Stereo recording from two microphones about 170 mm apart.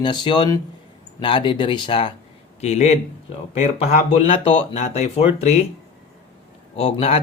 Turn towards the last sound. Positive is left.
turn(degrees=35)  # may be behind; listen again after turning